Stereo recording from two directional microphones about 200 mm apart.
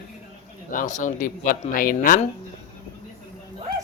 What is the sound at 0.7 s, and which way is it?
Speech, 40° left (ahead or behind).